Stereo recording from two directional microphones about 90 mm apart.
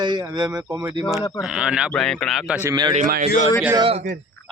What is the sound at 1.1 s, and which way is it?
Speech, 35° left (ahead or behind).